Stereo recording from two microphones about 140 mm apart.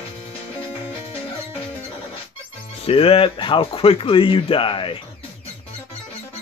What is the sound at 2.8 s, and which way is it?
Speech, 40° left (ahead or behind).